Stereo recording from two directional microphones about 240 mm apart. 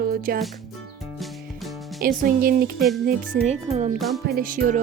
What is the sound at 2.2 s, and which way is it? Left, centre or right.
Speech, right.